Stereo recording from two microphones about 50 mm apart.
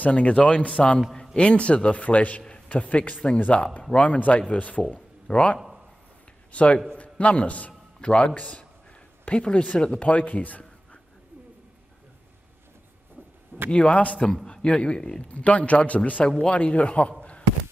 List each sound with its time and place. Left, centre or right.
0.0 s a man's voice: left
13.7 s a man's voice: left
15.2 s a man's voice: left
17.2 s a sound: left